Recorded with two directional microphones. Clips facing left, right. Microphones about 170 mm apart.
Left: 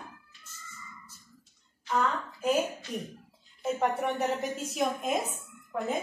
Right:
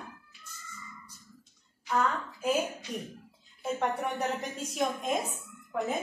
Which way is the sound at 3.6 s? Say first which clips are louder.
Left 2 dB; 5° left (ahead or behind).